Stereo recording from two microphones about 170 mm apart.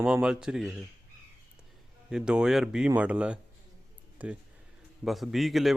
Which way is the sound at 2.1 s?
5° right (ahead or behind).